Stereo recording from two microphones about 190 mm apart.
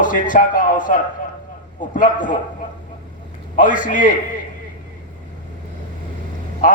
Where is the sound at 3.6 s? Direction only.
45° left (ahead or behind).